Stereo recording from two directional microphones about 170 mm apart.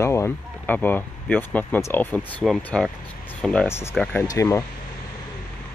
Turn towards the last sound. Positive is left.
turn(degrees=15)  # may be behind; listen again after turning